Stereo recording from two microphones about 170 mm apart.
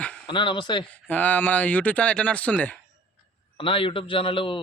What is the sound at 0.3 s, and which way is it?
Speech, 30° left (ahead or behind).